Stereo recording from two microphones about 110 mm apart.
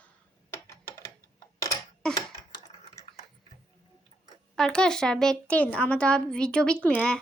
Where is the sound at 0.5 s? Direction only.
25° left (ahead or behind).